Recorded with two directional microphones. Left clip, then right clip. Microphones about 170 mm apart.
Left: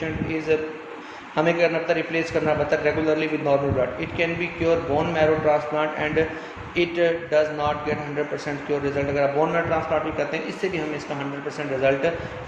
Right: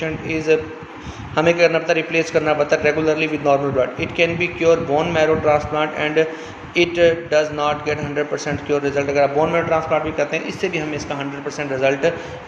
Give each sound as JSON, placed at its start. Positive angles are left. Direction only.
{"t": 0.3, "sound": "a man's voice", "side_deg": -40}
{"t": 11.4, "sound": "a man's voice", "side_deg": -40}